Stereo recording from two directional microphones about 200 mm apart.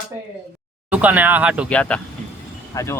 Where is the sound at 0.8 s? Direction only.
5° right (ahead or behind).